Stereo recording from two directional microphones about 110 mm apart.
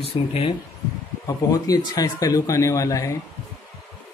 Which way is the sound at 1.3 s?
35° left (ahead or behind).